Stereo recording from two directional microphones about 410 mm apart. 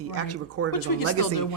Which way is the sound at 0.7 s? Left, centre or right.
Left.